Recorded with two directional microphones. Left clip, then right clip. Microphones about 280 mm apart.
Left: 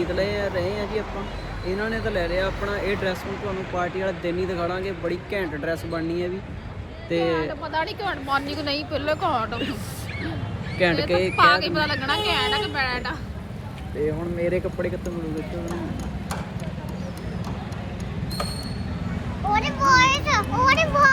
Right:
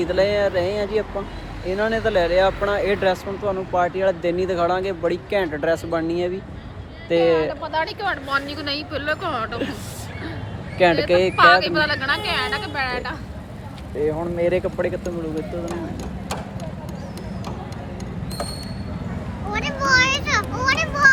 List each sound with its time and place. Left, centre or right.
0.1 s a woman's voice: centre
11.1 s speech: centre
11.3 s a woman's voice: centre
14.4 s speech: centre
19.5 s a child's voice: left